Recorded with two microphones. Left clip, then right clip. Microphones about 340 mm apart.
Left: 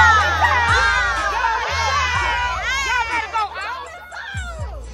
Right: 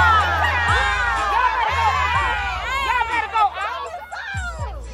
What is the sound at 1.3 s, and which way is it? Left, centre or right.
Music, centre.